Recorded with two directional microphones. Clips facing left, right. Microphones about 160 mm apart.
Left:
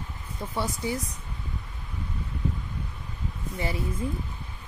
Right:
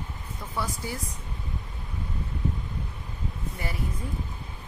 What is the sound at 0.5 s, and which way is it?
Speech, 20° left (ahead or behind).